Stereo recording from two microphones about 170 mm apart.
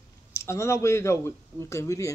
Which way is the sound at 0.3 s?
15° left (ahead or behind).